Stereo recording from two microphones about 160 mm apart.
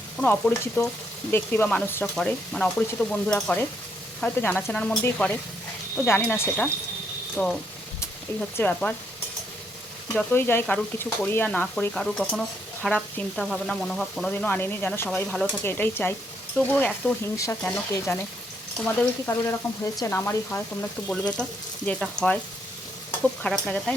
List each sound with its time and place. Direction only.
0.2 s speech: 10° left (ahead or behind)
2.1 s stir: 5° left (ahead or behind)
3.4 s speech: 5° left (ahead or behind)
7.4 s stir: 5° left (ahead or behind)
8.0 s speech: 15° left (ahead or behind)
10.2 s speech: 15° left (ahead or behind)
21.1 s stir: 5° left (ahead or behind)
21.8 s speech: 5° left (ahead or behind)
23.4 s stir: 5° left (ahead or behind)